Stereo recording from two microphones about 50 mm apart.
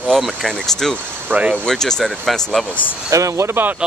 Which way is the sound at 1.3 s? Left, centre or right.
Right.